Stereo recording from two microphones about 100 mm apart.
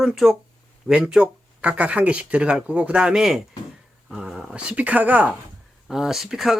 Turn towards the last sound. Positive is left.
turn(degrees=-5)  # may be behind; listen again after turning